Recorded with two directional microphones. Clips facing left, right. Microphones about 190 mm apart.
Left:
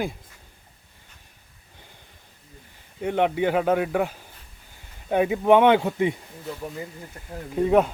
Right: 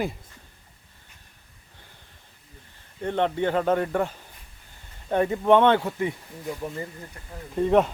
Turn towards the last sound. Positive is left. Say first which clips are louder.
# left 1 dB
turn(degrees=5)  # may be behind; listen again after turning